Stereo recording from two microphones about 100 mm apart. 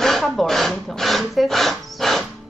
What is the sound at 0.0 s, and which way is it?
Dog, 5° left (ahead or behind).